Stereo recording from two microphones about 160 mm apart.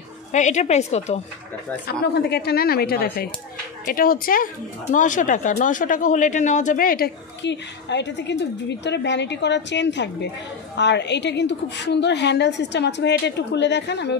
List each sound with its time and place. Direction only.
0.3 s a woman's voice: 45° left (ahead or behind)
1.9 s a woman's voice: 90° left; by 3.3 s 75° left (ahead or behind)
3.8 s speech: 65° left (ahead or behind)
4.9 s a woman's voice: 55° left (ahead or behind); by 14.1 s 90° left